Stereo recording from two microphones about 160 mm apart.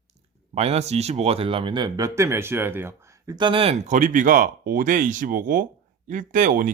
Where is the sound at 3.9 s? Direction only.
55° right (ahead or behind).